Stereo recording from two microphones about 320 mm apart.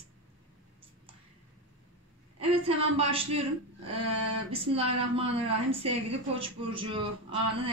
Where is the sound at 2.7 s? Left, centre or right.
Centre.